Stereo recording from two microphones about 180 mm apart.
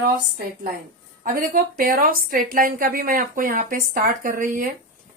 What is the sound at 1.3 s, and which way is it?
Speech, 50° right (ahead or behind).